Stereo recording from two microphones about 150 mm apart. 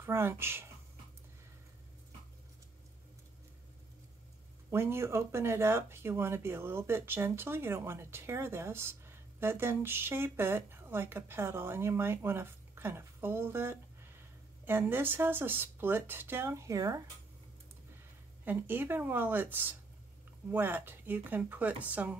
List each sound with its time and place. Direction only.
0.0 s speech: 15° right (ahead or behind)
4.6 s speech: 15° right (ahead or behind)
18.4 s speech: 10° right (ahead or behind)